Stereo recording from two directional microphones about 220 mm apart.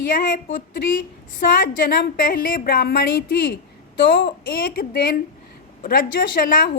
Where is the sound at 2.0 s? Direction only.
45° left (ahead or behind).